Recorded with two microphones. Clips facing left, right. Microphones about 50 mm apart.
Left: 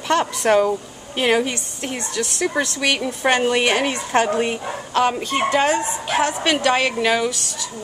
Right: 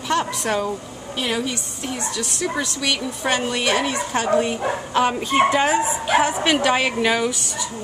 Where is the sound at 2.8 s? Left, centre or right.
Left.